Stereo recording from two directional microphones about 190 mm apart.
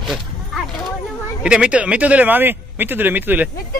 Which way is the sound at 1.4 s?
5° right (ahead or behind).